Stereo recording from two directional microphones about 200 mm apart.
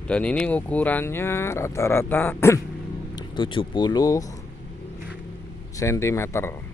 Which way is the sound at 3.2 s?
25° left (ahead or behind).